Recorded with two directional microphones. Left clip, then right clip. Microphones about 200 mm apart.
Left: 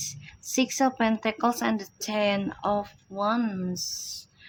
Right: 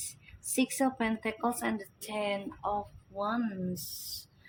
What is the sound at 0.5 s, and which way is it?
A woman's voice, 25° left (ahead or behind).